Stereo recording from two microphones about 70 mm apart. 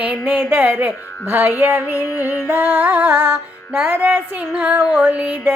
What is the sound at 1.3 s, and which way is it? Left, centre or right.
Music, right.